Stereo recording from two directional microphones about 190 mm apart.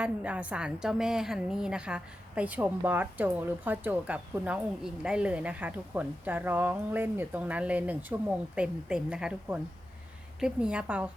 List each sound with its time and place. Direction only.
0.0 s a woman's voice: 5° right (ahead or behind)